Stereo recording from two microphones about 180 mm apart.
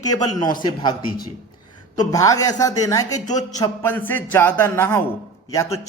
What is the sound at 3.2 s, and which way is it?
Speech, 45° left (ahead or behind).